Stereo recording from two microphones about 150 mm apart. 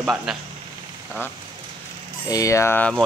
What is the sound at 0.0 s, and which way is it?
Speech, 5° right (ahead or behind).